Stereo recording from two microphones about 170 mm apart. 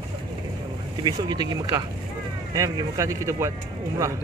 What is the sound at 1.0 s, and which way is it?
Speech, 25° right (ahead or behind).